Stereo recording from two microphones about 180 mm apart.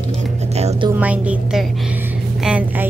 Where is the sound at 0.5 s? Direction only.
35° right (ahead or behind).